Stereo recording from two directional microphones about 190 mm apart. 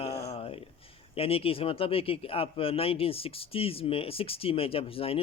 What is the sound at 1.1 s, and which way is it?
Speech, 30° left (ahead or behind).